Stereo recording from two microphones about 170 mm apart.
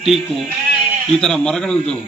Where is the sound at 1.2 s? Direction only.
5° left (ahead or behind).